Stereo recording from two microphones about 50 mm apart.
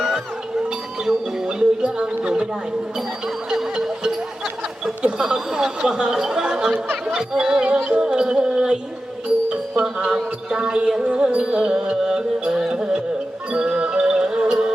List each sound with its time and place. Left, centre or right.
1.0 s a sound: centre
3.2 s music: centre
5.2 s music: centre
9.8 s music: centre